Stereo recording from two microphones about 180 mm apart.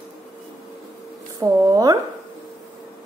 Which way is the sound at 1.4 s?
20° right (ahead or behind).